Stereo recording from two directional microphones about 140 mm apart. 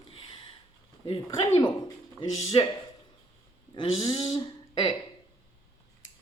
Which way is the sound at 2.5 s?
40° left (ahead or behind).